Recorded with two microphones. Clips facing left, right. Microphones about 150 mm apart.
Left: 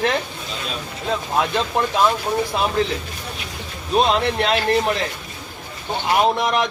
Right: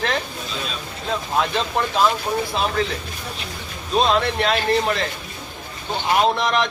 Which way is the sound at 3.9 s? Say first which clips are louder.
Left 1 dB; 20° left (ahead or behind).